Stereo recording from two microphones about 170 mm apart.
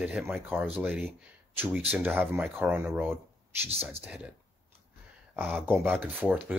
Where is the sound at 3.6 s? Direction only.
35° right (ahead or behind).